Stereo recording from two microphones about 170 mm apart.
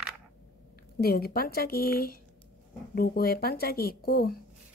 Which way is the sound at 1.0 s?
65° left (ahead or behind).